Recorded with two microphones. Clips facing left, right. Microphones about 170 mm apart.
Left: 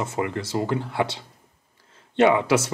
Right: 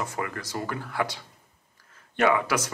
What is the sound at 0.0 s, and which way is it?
Speech, 25° left (ahead or behind).